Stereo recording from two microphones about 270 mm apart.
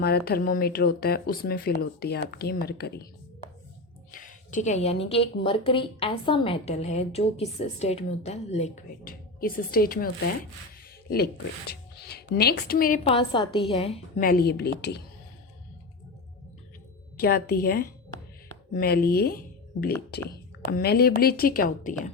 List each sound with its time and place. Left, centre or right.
0.3 s speech: left
4.1 s a woman's voice: left
11.1 s speech: left
13.1 s a woman's voice: centre; by 15.0 s left
17.2 s speech: left